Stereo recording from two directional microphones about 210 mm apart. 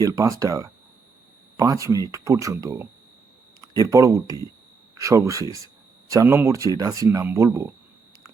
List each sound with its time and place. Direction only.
0.0 s speech: 15° right (ahead or behind)